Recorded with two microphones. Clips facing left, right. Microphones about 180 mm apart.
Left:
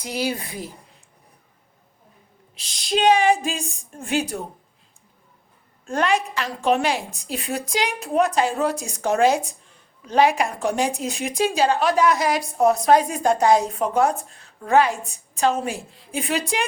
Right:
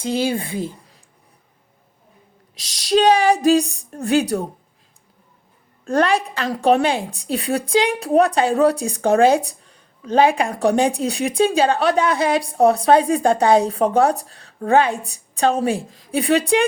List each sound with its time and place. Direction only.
0.0 s speech: 25° right (ahead or behind)
2.6 s a woman's voice: 40° right (ahead or behind)
5.8 s a woman's voice: 35° right (ahead or behind)